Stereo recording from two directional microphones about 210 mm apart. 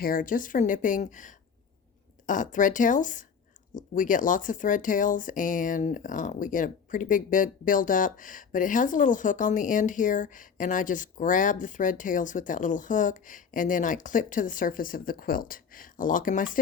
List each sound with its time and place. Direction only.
0.0 s speech: 40° left (ahead or behind)